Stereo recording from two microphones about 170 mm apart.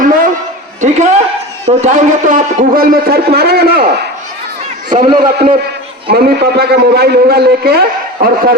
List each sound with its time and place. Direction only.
0.8 s a man's voice: 45° right (ahead or behind); by 4.0 s 65° right (ahead or behind)
4.9 s a man's voice: 55° right (ahead or behind)
6.1 s a man's voice: 65° right (ahead or behind)